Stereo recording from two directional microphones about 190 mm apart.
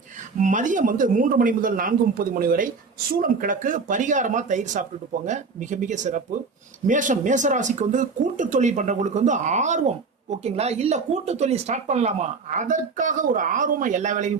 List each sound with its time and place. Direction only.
0.3 s speech: 40° right (ahead or behind)